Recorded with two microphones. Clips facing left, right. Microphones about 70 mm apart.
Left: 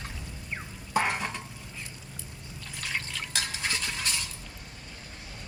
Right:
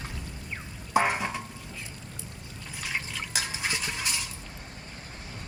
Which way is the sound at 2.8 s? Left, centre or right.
Centre.